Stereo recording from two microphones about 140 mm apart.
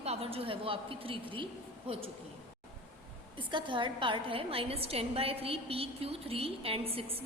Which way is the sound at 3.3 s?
35° right (ahead or behind).